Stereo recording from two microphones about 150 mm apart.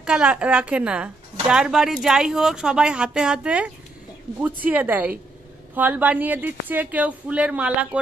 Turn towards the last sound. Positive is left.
turn(degrees=-10)  # may be behind; listen again after turning